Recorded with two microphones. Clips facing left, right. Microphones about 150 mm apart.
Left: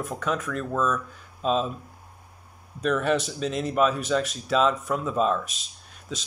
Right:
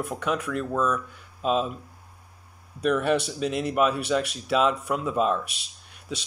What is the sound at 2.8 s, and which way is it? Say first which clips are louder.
Speech: right 1 dB; 10° right (ahead or behind).